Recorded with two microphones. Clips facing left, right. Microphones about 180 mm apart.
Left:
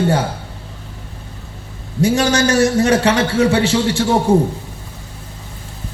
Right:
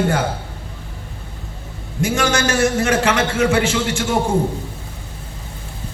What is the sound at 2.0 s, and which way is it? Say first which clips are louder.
A man's voice: left 4 dB; 35° left (ahead or behind).